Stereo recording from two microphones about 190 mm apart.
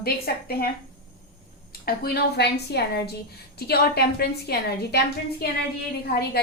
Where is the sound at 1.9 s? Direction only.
55° left (ahead or behind).